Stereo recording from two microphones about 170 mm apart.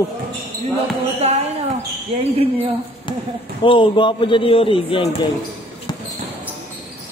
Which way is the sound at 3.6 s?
30° left (ahead or behind).